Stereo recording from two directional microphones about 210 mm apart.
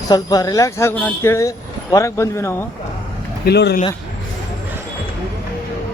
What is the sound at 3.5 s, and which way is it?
Speech, 50° left (ahead or behind).